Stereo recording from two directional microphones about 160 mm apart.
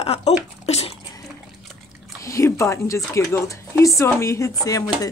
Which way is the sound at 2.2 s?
20° left (ahead or behind).